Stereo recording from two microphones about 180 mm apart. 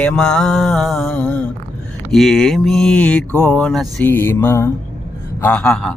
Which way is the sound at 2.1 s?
Centre (ahead or behind).